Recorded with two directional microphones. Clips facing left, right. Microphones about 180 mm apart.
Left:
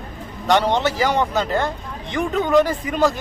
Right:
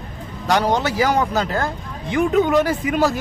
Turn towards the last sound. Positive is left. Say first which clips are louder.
# even
turn(degrees=-5)  # may be behind; listen again after turning